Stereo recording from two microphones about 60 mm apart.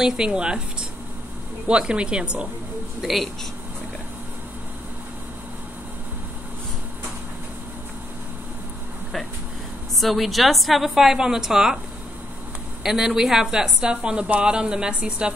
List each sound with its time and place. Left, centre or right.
0.0 s a woman's voice: centre
1.7 s a woman's voice: centre
3.0 s a woman's voice: centre
9.9 s a woman's voice: centre
12.8 s a woman's voice: centre